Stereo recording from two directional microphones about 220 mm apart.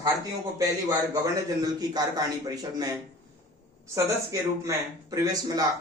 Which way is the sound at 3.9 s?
15° right (ahead or behind).